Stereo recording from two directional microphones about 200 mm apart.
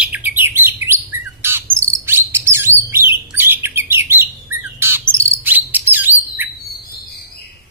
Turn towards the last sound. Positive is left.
turn(degrees=-10)  # may be behind; listen again after turning